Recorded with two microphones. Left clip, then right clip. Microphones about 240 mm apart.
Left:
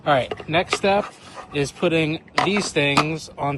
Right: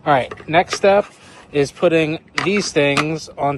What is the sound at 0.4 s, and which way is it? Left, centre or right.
Speech, right.